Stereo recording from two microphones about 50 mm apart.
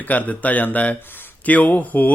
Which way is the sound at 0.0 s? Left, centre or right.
Left.